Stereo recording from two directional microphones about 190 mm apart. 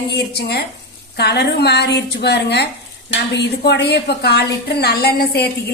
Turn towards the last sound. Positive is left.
turn(degrees=55)  # may be behind; listen again after turning